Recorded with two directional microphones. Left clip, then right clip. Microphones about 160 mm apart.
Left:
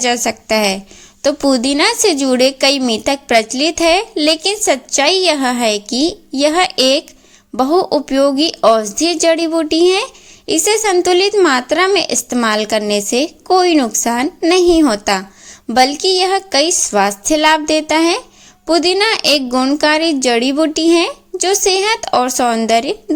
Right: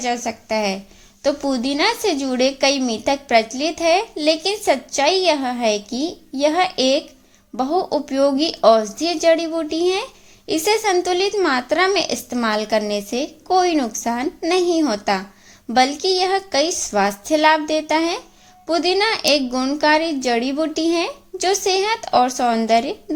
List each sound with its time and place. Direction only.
0.0 s a woman's voice: 35° left (ahead or behind)